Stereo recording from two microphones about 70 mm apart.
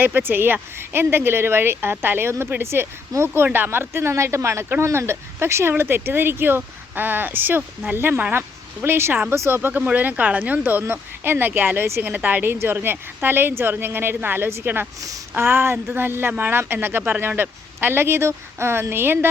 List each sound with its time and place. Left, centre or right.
0.0 s speech: right
9.6 s speech: right
12.0 s speech: right